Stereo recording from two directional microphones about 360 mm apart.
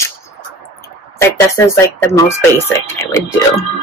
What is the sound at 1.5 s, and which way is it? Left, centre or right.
Speech, centre.